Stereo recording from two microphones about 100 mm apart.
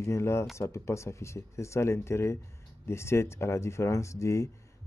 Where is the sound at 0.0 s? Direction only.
30° left (ahead or behind).